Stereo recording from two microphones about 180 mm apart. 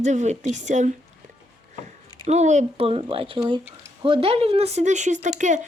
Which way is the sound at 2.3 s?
40° right (ahead or behind).